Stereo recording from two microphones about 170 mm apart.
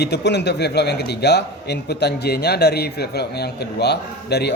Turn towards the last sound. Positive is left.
turn(degrees=75)  # may be behind; listen again after turning